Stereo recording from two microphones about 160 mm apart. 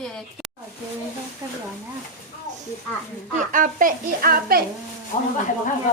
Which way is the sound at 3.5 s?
55° right (ahead or behind).